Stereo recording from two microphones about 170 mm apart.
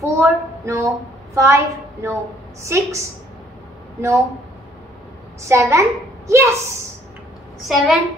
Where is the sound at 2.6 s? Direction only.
15° right (ahead or behind).